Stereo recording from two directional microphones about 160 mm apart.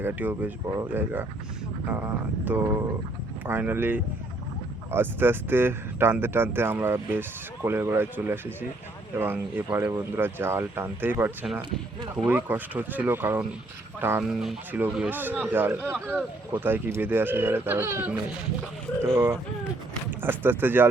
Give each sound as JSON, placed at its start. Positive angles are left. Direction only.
{"t": 0.0, "sound": "speech", "side_deg": -10}
{"t": 12.3, "sound": "speech", "side_deg": -10}
{"t": 14.3, "sound": "speech", "side_deg": 0}